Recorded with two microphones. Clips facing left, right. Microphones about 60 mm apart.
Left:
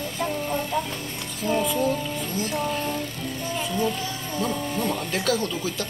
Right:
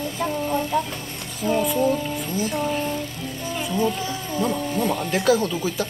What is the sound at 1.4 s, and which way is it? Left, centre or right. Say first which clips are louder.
Music: right 3 dB; centre.